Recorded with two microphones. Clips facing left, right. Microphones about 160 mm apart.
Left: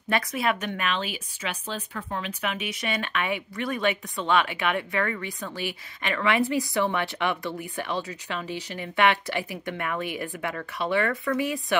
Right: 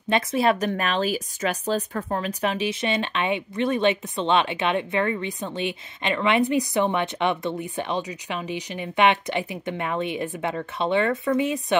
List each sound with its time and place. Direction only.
0.1 s speech: 30° right (ahead or behind)